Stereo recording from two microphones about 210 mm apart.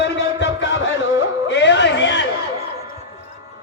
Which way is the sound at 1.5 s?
60° left (ahead or behind).